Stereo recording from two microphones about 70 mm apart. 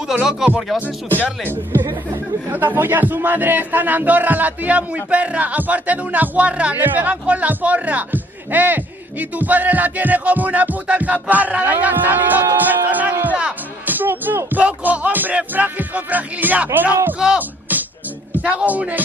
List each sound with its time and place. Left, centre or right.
0.1 s speech: centre
1.2 s speech: left
1.7 s speech: right
2.5 s speech: right
13.2 s music: right
14.6 s speech: right
17.4 s music: right
18.3 s speech: centre